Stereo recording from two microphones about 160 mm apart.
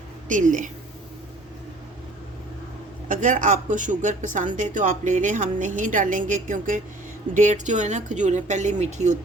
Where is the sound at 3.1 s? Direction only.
55° right (ahead or behind).